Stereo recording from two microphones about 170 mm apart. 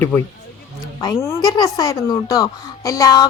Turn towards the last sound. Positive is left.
turn(degrees=20)  # may be behind; listen again after turning